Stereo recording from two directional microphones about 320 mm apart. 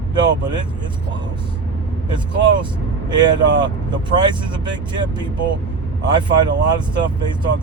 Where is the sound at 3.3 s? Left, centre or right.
Centre.